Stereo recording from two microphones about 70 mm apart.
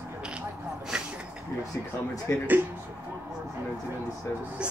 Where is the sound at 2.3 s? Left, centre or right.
Left.